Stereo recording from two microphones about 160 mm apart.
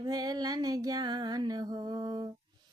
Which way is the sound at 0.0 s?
25° right (ahead or behind).